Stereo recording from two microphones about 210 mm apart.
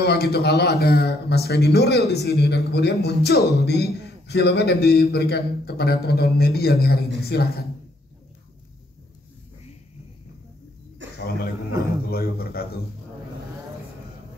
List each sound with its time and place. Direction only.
0.0 s speech: 50° left (ahead or behind)
11.0 s a sound: 60° right (ahead or behind)
12.1 s speech: 45° left (ahead or behind)